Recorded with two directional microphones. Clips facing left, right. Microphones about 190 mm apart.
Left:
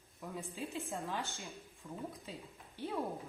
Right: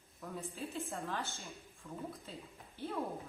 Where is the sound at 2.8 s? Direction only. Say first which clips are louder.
Left 1 dB; 15° left (ahead or behind).